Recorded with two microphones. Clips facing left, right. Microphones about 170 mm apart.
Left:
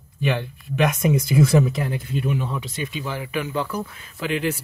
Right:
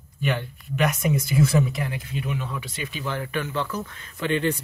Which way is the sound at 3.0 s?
5° left (ahead or behind).